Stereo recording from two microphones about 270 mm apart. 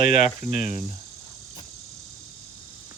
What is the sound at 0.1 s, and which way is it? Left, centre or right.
Speech, centre.